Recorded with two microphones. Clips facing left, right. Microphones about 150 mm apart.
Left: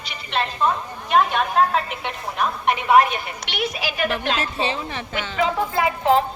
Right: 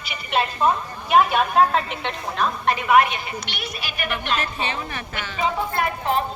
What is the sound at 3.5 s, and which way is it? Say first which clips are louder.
Speech: left 7 dB; 90° left.